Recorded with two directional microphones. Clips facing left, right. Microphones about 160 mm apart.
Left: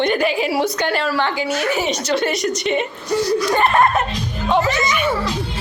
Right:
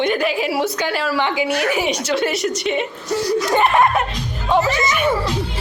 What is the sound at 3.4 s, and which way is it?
Speech, 20° right (ahead or behind).